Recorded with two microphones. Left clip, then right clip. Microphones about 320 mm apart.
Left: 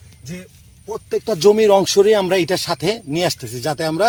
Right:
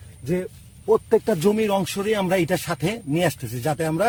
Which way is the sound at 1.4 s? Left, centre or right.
Centre.